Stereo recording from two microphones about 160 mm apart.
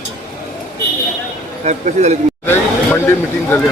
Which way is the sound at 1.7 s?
45° right (ahead or behind).